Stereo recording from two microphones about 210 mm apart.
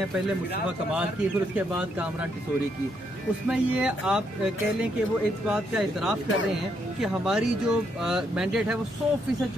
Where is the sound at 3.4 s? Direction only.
5° right (ahead or behind).